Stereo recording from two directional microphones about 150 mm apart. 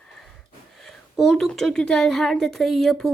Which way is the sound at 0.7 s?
Centre (ahead or behind).